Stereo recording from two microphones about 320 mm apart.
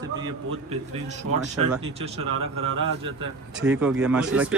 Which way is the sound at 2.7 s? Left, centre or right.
Right.